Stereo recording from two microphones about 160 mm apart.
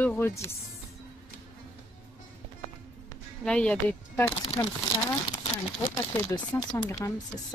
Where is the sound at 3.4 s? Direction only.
5° left (ahead or behind).